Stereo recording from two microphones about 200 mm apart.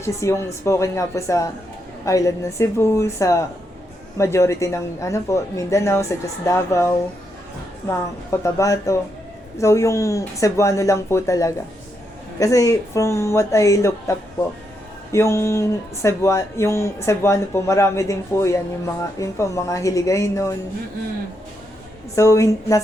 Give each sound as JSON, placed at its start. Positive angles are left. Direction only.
{"t": 0.0, "sound": "speech", "side_deg": 15}
{"t": 22.1, "sound": "speech", "side_deg": 15}